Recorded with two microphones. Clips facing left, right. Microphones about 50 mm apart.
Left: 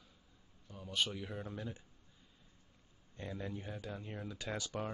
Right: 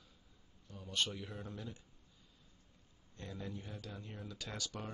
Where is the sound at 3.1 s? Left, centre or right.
Left.